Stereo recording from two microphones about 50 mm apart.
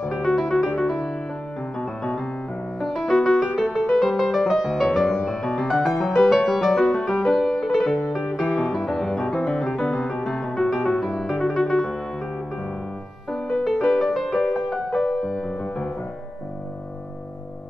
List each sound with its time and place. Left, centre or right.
0.1 s piano: centre
0.8 s music: centre
2.8 s piano: centre
3.5 s music: centre
13.3 s music: centre